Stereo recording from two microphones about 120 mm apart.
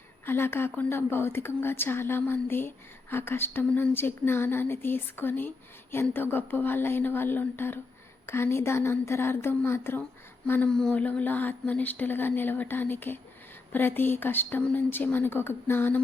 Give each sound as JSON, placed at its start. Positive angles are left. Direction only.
{"t": 0.3, "sound": "a woman's voice", "side_deg": 20}